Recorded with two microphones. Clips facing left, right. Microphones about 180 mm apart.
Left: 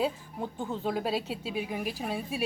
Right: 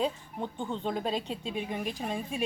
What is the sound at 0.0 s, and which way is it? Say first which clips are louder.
A woman's voice: left 1 dB; 5° left (ahead or behind).